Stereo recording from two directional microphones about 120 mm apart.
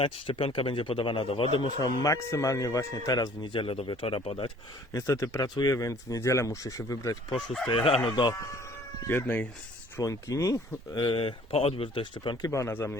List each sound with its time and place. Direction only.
0.0 s speech: 50° left (ahead or behind)
1.8 s speech: 30° left (ahead or behind); by 4.5 s 50° left (ahead or behind)
4.9 s speech: 25° left (ahead or behind)
7.3 s speech: 5° left (ahead or behind)
7.7 s speech: 50° left (ahead or behind)
9.0 s speech: 20° left (ahead or behind)
10.0 s speech: 30° left (ahead or behind)
10.9 s speech: 40° left (ahead or behind)
11.2 s speech: 55° left (ahead or behind)
12.5 s speech: 20° left (ahead or behind)